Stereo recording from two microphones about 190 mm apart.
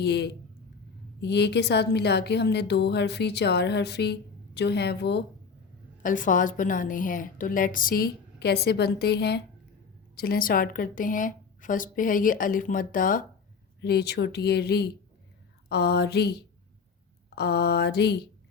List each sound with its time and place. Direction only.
0.0 s a woman's voice: 60° left (ahead or behind)
6.0 s a woman's voice: 45° left (ahead or behind)
13.8 s a woman's voice: 60° left (ahead or behind)